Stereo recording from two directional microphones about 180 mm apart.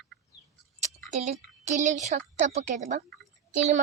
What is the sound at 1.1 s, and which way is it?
A woman's voice, 40° right (ahead or behind).